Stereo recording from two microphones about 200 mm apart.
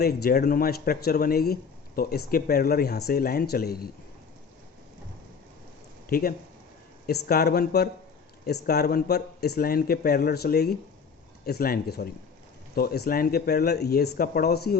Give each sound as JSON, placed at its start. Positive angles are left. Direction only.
{"t": 0.0, "sound": "speech", "side_deg": 50}
{"t": 6.1, "sound": "speech", "side_deg": 45}